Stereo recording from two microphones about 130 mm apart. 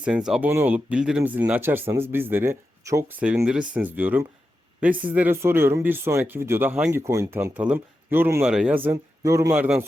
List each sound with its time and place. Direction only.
0.0 s speech: 5° right (ahead or behind); by 9.6 s 25° right (ahead or behind)
9.6 s speech: 10° right (ahead or behind)